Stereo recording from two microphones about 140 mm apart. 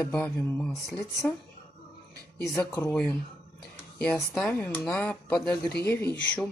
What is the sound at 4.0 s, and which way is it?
Speech, 5° left (ahead or behind).